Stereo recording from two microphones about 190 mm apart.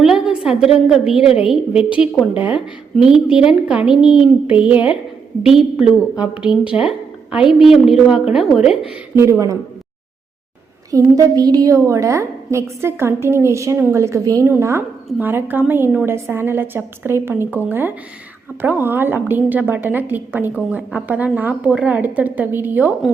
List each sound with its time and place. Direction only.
0.0 s a woman's voice: 5° right (ahead or behind)
9.1 s a woman's voice: 15° right (ahead or behind)
10.9 s a woman's voice: 20° right (ahead or behind)